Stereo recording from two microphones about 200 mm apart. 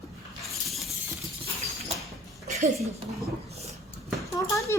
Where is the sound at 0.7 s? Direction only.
Centre (ahead or behind).